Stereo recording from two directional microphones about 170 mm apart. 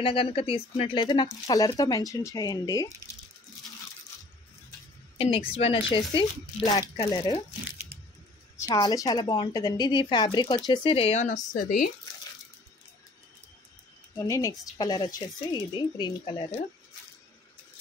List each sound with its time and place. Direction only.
0.0 s speech: 30° left (ahead or behind)
5.1 s speech: 35° left (ahead or behind)
8.5 s speech: 20° left (ahead or behind); by 11.4 s 45° left (ahead or behind)
11.5 s speech: 55° left (ahead or behind)
14.1 s speech: 20° left (ahead or behind)